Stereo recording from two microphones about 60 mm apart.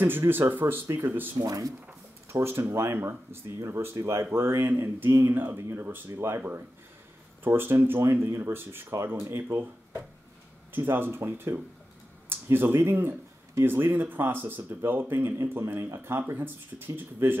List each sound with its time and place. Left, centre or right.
0.3 s speech: right
1.4 s speech: right
2.2 s speech: right
7.4 s speech: right
10.7 s speech: right